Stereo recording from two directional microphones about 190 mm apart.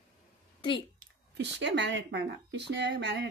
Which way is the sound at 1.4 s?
65° right (ahead or behind).